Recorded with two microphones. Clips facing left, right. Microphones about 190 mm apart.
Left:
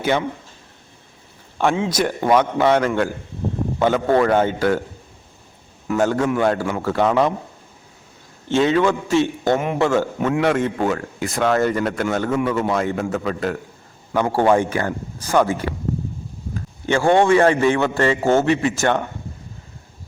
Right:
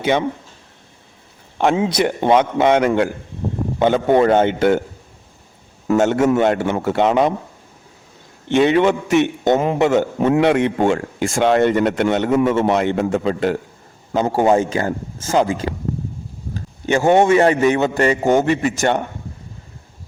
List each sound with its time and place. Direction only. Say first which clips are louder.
0.0 s speech: right 2 dB; 20° right (ahead or behind)
1.5 s speech: right 3 dB; 20° right (ahead or behind)
6.0 s speech: right 3 dB; 20° right (ahead or behind)
8.7 s a man's voice: right 2 dB; 20° right (ahead or behind)